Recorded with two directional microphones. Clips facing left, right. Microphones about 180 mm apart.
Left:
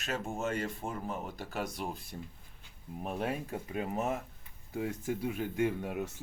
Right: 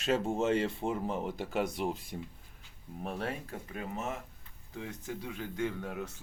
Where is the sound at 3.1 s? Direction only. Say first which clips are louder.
Left 4 dB; 10° left (ahead or behind).